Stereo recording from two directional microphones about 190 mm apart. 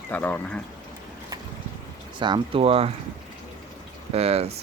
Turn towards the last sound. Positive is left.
turn(degrees=-30)  # may be behind; listen again after turning